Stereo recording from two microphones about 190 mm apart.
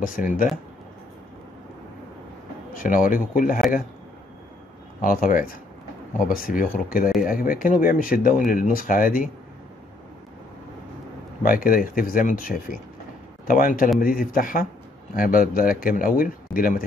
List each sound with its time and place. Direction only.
2.7 s speech: 45° left (ahead or behind)
5.0 s speech: 45° left (ahead or behind)
11.4 s speech: 50° left (ahead or behind)